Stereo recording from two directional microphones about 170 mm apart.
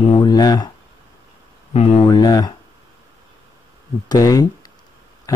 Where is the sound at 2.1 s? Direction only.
25° left (ahead or behind).